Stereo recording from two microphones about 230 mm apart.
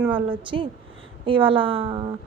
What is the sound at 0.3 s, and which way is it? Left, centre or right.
A woman's voice, right.